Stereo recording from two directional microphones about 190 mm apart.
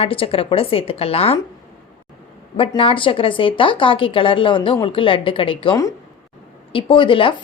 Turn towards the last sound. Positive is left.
turn(degrees=25)  # may be behind; listen again after turning